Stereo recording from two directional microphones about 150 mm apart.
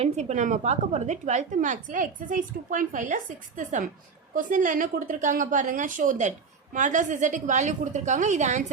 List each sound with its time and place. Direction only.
0.0 s a woman's voice: 50° right (ahead or behind)
4.4 s a woman's voice: 60° right (ahead or behind)